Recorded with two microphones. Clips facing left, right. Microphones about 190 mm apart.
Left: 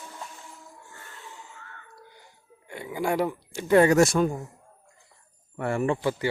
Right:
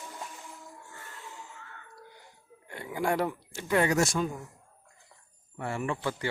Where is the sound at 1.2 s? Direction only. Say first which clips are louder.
Left 1 dB; centre (ahead or behind).